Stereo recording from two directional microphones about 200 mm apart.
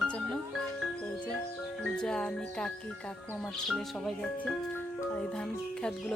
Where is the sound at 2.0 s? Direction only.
5° left (ahead or behind).